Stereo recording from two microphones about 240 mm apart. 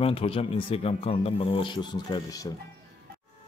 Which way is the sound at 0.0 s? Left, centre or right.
Left.